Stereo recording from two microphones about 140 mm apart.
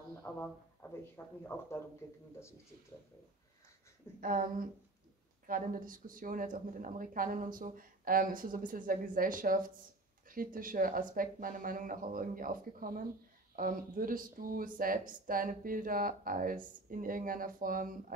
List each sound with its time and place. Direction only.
0.3 s speech: 15° left (ahead or behind)
4.2 s speech: 80° right